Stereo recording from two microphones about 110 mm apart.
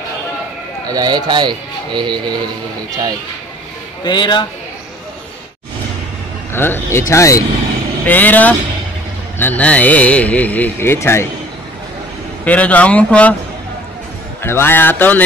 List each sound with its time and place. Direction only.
0.8 s speech: 40° right (ahead or behind)
4.0 s a man's voice: 45° left (ahead or behind)
6.5 s speech: 20° left (ahead or behind)
8.0 s a man's voice: 15° left (ahead or behind)
12.4 s a man's voice: 15° left (ahead or behind)
14.4 s speech: 20° left (ahead or behind)